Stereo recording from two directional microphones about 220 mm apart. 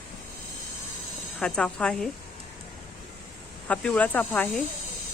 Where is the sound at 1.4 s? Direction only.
5° left (ahead or behind).